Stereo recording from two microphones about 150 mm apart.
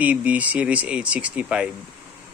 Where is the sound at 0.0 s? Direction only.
10° right (ahead or behind).